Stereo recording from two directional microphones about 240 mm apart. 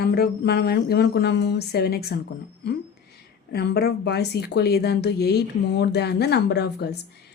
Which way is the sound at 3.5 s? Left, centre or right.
Left.